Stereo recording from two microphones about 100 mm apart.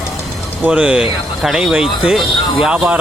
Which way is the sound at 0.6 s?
15° right (ahead or behind).